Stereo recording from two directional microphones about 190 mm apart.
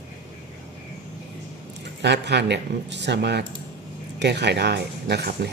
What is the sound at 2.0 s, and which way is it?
Speech, 60° right (ahead or behind).